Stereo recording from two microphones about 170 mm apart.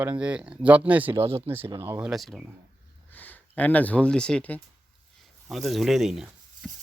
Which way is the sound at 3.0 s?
10° left (ahead or behind).